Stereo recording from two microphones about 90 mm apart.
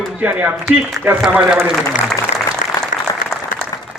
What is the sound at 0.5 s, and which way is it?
Speech, centre (ahead or behind).